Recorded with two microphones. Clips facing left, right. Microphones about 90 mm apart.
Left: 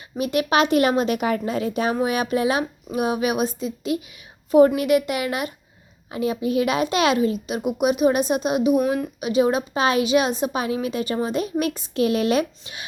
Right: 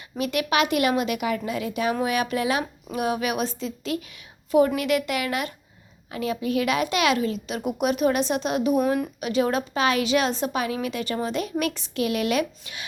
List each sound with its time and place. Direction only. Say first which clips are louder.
0.2 s a woman's voice: left 3 dB; 25° left (ahead or behind)
4.5 s a woman's voice: left 5 dB; 30° left (ahead or behind); by 9.0 s 5° left (ahead or behind)
9.2 s a woman's voice: left 5 dB; 20° left (ahead or behind)